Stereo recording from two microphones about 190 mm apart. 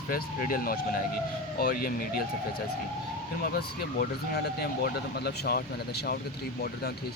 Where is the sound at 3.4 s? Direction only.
55° left (ahead or behind).